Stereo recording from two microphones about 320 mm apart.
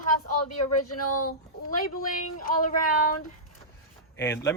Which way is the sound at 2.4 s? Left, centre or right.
Left.